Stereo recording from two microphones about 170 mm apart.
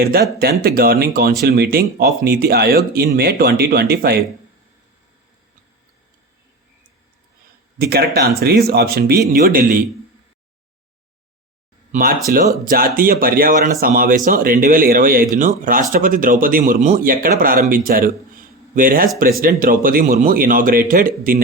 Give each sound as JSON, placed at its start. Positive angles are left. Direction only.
{"t": 0.0, "sound": "speech", "side_deg": -65}
{"t": 7.8, "sound": "speech", "side_deg": -65}
{"t": 11.9, "sound": "speech", "side_deg": -55}